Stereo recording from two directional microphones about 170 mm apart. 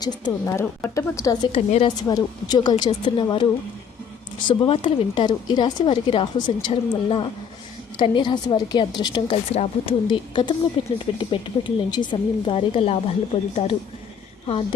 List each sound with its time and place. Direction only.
0.0 s a woman's voice: 20° left (ahead or behind)
1.5 s a woman's voice: 35° left (ahead or behind)
4.4 s a woman's voice: 30° left (ahead or behind)